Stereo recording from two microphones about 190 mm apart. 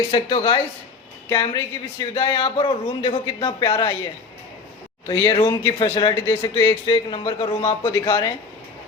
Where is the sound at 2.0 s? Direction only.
25° left (ahead or behind).